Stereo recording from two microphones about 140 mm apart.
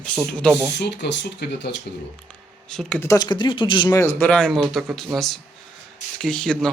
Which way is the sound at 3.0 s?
25° left (ahead or behind).